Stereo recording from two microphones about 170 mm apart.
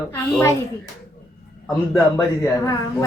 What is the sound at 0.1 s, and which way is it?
Speech, 20° left (ahead or behind).